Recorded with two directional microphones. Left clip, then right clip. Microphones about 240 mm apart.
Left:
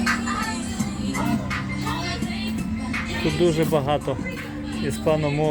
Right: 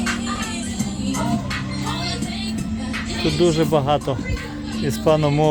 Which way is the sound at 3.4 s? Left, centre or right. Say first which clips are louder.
Right 3 dB; right.